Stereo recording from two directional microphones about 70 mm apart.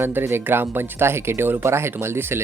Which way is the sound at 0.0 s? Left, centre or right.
Right.